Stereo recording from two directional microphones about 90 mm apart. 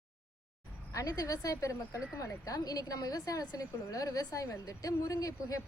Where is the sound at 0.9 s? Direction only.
45° left (ahead or behind).